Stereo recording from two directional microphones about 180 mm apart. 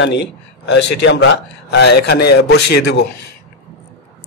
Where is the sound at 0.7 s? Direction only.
75° left (ahead or behind).